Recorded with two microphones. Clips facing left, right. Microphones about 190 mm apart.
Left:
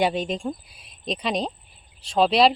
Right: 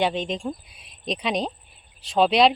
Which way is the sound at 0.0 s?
10° left (ahead or behind).